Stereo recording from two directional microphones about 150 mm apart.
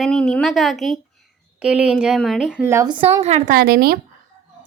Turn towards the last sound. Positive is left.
turn(degrees=-90)